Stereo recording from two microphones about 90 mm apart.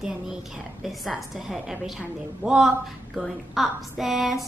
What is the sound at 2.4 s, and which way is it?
Speech, 20° right (ahead or behind).